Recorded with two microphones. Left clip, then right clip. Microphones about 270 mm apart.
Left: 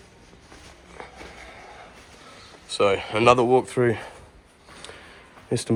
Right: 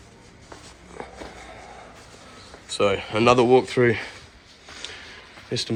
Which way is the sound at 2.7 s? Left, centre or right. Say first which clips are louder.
Left 1 dB; centre.